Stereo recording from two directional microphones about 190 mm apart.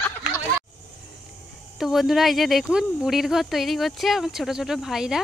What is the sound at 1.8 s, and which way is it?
Speech, centre (ahead or behind).